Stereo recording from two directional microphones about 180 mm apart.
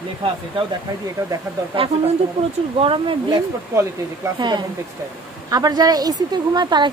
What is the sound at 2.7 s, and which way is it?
A woman's voice, 30° right (ahead or behind).